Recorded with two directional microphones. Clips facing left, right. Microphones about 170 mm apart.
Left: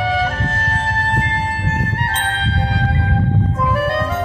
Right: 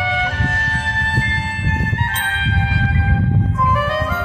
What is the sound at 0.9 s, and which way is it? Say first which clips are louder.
Music: left 2 dB; 45° left (ahead or behind).